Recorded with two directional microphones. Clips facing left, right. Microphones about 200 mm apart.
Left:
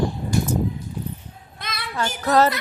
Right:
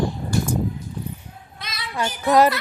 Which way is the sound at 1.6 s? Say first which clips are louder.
Left 3 dB; 50° left (ahead or behind).